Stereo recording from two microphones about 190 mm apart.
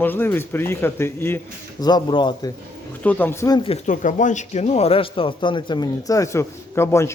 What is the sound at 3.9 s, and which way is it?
Speech, 40° left (ahead or behind).